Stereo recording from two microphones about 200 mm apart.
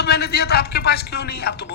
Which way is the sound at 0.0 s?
50° left (ahead or behind).